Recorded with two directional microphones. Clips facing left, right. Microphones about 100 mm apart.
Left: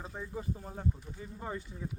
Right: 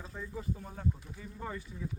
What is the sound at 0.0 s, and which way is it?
Speech, 35° left (ahead or behind).